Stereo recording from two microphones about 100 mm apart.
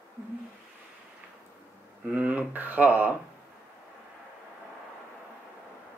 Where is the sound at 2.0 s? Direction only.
15° right (ahead or behind).